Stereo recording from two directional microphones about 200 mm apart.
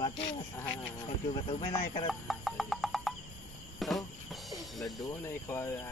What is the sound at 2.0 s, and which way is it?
Music, centre (ahead or behind).